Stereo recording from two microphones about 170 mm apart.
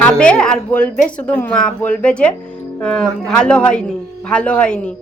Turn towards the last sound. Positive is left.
turn(degrees=5)  # may be behind; listen again after turning